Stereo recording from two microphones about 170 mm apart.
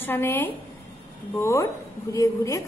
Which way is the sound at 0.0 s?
15° left (ahead or behind).